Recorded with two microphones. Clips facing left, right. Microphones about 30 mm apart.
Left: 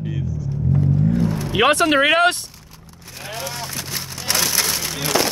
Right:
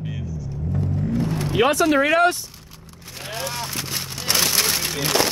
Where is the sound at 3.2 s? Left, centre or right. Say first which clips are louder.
Even; centre.